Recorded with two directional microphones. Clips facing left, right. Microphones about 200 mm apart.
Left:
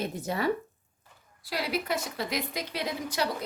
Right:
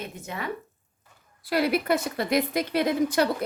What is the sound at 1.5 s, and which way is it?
A woman's voice, 55° right (ahead or behind).